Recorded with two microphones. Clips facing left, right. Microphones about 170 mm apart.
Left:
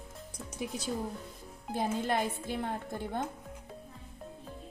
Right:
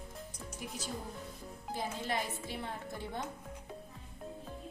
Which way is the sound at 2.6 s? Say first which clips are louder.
Left 5 dB; 55° left (ahead or behind).